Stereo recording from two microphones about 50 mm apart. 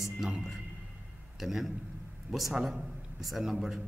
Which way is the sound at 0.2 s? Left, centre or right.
Centre.